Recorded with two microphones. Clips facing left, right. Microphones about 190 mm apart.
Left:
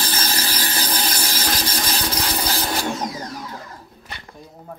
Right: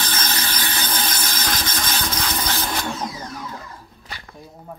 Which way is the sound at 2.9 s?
15° left (ahead or behind).